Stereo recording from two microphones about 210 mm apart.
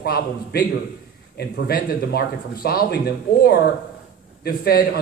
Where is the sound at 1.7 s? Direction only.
45° left (ahead or behind).